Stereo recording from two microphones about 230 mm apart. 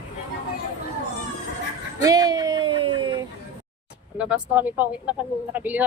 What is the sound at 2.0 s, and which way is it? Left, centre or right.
Speech, centre.